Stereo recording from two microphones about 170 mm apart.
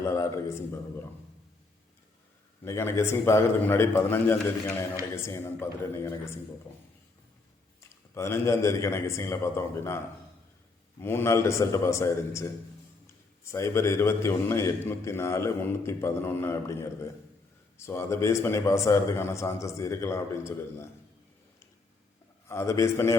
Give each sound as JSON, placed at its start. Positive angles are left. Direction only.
{"t": 0.0, "sound": "a man's voice", "side_deg": 15}
{"t": 2.6, "sound": "a man's voice", "side_deg": 15}
{"t": 7.8, "sound": "a man's voice", "side_deg": 15}
{"t": 11.0, "sound": "a man's voice", "side_deg": 15}
{"t": 22.4, "sound": "a man's voice", "side_deg": 15}